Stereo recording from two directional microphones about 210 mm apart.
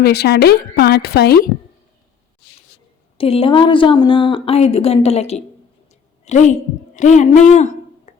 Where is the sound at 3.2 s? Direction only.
25° left (ahead or behind).